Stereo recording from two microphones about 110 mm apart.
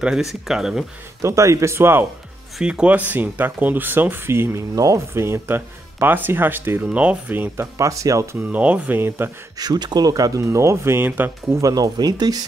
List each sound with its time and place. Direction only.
0.0 s speech: 5° right (ahead or behind)
1.2 s speech: 30° right (ahead or behind)
2.6 s speech: 10° right (ahead or behind); by 8.4 s 30° right (ahead or behind)
8.4 s speech: 15° right (ahead or behind)
9.6 s speech: 40° right (ahead or behind); by 11.3 s 15° right (ahead or behind)
11.5 s speech: 35° right (ahead or behind)